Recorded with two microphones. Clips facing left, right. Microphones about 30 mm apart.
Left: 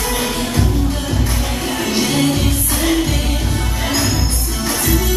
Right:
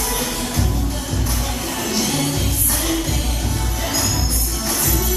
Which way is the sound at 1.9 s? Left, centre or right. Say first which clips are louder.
Left 5 dB; left.